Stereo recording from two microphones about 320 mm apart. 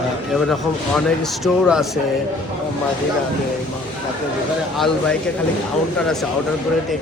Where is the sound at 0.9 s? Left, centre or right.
Centre.